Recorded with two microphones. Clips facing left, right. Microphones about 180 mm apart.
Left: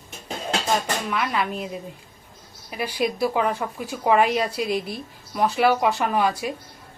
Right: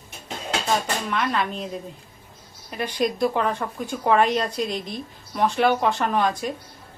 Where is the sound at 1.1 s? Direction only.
5° left (ahead or behind).